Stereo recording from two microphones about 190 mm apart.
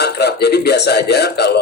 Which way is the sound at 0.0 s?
60° left (ahead or behind).